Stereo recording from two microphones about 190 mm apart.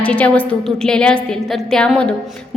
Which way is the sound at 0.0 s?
5° left (ahead or behind).